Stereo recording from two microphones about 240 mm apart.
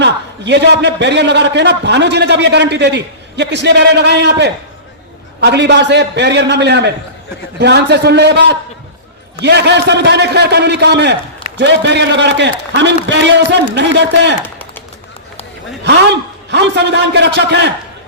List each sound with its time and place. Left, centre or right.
0.0 s a man's voice: right
15.8 s a man's voice: right